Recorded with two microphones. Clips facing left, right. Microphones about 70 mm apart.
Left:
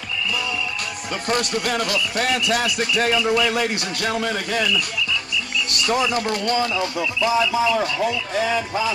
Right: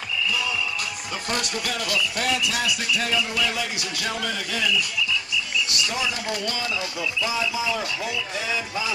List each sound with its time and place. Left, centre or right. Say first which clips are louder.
1.3 s speech: left 6 dB; left